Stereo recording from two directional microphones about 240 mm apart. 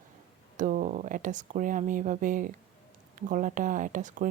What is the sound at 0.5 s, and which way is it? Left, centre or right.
Speech, right.